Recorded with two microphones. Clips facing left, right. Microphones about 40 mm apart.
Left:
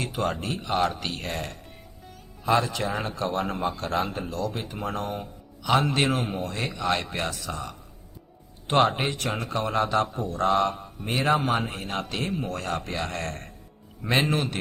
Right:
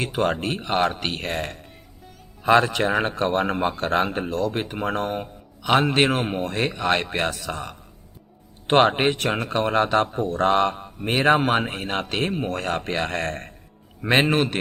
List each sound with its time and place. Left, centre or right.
0.0 s a man's voice: right
2.4 s a man's voice: right